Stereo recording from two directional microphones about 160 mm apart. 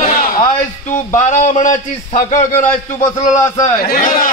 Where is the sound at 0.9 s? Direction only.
50° left (ahead or behind).